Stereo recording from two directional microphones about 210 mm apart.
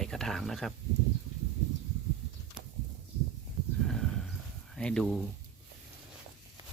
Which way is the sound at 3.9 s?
Centre (ahead or behind).